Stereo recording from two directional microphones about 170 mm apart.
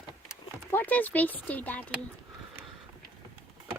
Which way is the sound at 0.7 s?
10° left (ahead or behind).